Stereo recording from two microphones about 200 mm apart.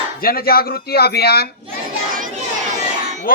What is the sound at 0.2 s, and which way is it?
Speech, 50° left (ahead or behind).